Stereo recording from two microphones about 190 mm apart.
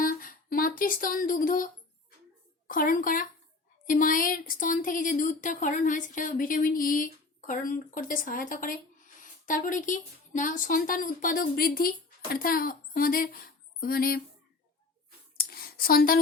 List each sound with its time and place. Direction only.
0.0 s music: 50° left (ahead or behind)
2.6 s a woman's voice: 45° left (ahead or behind)
15.4 s a sound: 50° left (ahead or behind)